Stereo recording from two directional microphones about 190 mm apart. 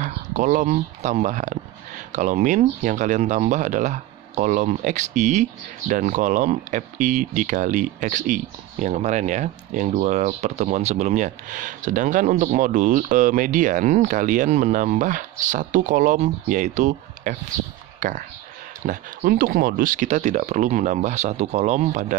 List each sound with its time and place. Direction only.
0.0 s speech: 40° right (ahead or behind)